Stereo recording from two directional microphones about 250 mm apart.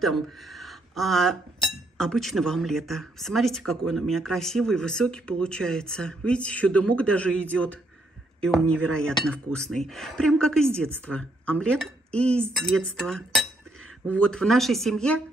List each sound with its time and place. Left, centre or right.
0.0 s speech: centre